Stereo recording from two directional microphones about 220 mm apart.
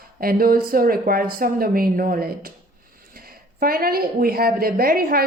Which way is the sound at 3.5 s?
40° right (ahead or behind).